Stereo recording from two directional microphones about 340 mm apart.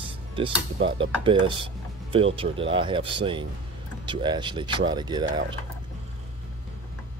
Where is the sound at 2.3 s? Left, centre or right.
Centre.